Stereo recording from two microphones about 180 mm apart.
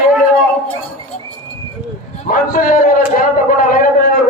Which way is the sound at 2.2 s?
50° left (ahead or behind).